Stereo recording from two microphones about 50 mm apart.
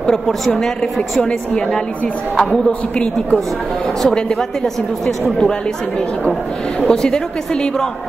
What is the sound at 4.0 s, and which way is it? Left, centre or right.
A woman's voice, centre.